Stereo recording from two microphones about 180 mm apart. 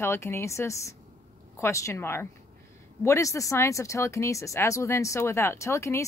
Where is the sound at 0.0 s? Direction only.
15° left (ahead or behind).